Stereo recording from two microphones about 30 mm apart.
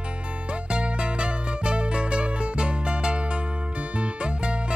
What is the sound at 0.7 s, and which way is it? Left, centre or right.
Music, right.